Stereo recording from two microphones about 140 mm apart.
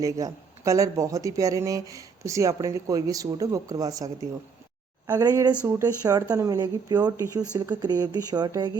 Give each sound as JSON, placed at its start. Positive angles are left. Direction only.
{"t": 0.0, "sound": "speech", "side_deg": -25}